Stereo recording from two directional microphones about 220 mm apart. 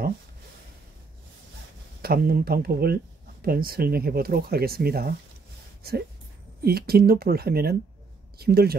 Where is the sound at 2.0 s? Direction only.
45° right (ahead or behind).